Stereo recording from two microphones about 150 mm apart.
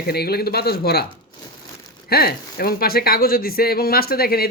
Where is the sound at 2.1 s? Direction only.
90° left.